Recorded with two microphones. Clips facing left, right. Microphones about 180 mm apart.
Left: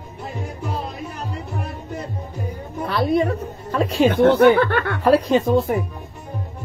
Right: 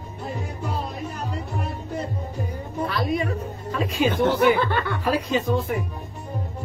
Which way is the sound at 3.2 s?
75° left (ahead or behind).